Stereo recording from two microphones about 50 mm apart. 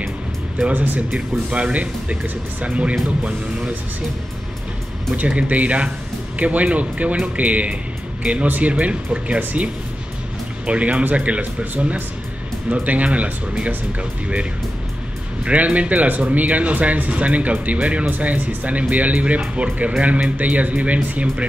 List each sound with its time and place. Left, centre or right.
1.5 s speech: right
5.1 s speech: right
10.7 s speech: right